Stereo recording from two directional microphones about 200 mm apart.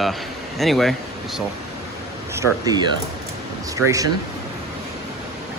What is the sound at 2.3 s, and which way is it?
Speech, 20° right (ahead or behind).